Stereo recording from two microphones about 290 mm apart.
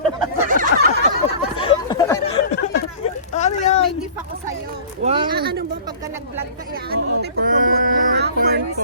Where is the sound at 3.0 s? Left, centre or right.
Left.